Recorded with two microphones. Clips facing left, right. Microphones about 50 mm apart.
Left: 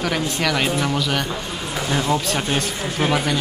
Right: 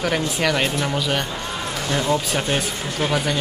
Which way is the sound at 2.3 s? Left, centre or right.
Centre.